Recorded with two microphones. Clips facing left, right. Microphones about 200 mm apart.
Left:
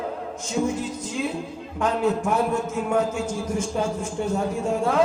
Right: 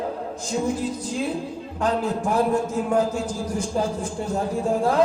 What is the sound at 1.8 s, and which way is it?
A man's voice, 35° right (ahead or behind).